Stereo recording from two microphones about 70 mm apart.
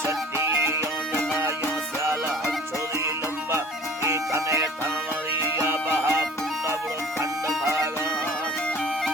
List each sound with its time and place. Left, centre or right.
0.3 s music: right
4.0 s music: right
5.4 s music: right